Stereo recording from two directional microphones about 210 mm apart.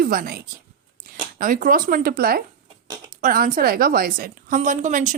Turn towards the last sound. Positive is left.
turn(degrees=-35)  # may be behind; listen again after turning